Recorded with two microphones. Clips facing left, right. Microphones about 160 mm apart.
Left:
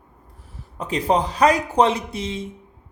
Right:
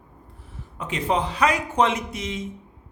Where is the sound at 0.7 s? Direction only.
35° left (ahead or behind).